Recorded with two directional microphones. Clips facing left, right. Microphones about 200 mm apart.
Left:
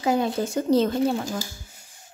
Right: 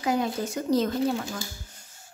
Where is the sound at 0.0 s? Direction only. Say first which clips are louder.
Left 3 dB; 30° left (ahead or behind).